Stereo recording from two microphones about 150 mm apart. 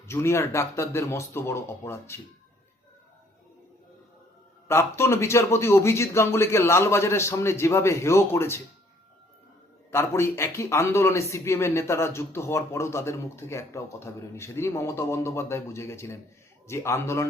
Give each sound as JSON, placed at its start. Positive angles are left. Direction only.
{"t": 0.0, "sound": "speech", "side_deg": 15}
{"t": 4.7, "sound": "speech", "side_deg": 15}
{"t": 9.9, "sound": "a man's voice", "side_deg": 15}